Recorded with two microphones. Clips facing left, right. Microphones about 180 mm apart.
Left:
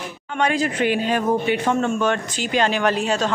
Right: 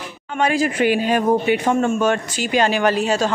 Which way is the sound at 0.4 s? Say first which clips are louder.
Right 2 dB; 5° right (ahead or behind).